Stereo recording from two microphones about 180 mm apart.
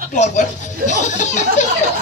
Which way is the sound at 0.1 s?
40° left (ahead or behind).